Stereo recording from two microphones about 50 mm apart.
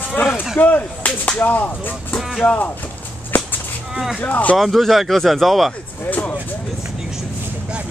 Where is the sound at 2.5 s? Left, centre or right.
Left.